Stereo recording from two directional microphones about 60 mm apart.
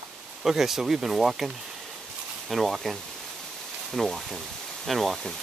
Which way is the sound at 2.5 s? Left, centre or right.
Centre.